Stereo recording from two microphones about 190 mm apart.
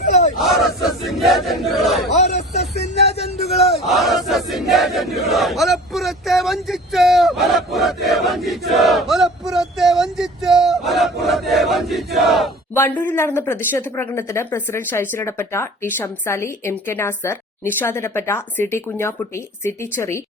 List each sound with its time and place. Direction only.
0.0 s battle cry: 40° left (ahead or behind)
0.3 s battle cry: centre (ahead or behind)
2.0 s a sound: 35° left (ahead or behind)
3.6 s battle cry: centre (ahead or behind)
12.7 s a woman's voice: 10° left (ahead or behind)